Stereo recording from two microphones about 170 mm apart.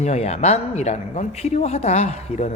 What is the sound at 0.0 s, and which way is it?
A woman's voice, 40° left (ahead or behind).